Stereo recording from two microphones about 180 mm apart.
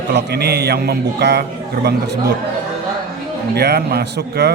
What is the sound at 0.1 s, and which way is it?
A man's voice, 70° right (ahead or behind).